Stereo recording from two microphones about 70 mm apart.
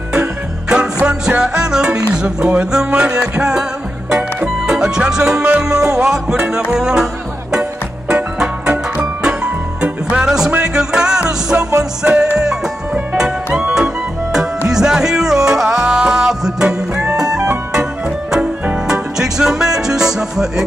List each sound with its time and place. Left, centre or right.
0.1 s music: centre
8.1 s music: centre
12.0 s music: right
12.4 s music: centre
18.9 s music: centre